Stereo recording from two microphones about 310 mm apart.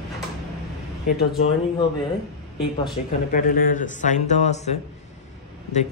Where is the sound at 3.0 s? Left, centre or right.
Left.